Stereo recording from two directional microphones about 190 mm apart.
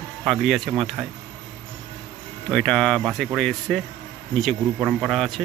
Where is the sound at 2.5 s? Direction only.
Centre (ahead or behind).